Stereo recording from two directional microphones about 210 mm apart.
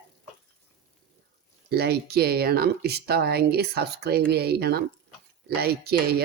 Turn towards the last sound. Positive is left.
turn(degrees=-45)  # may be behind; listen again after turning